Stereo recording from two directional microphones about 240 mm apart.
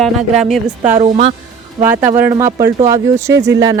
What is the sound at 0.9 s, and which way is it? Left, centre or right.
Speech, right.